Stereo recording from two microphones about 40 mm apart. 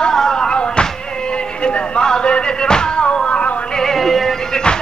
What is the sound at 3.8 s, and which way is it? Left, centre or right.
Music, centre.